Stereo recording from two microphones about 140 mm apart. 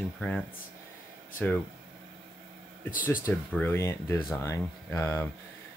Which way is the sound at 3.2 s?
15° left (ahead or behind).